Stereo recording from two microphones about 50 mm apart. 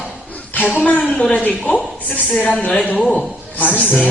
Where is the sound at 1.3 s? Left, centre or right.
Left.